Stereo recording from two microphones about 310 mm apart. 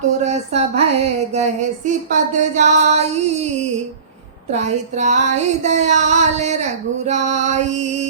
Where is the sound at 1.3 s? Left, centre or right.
Right.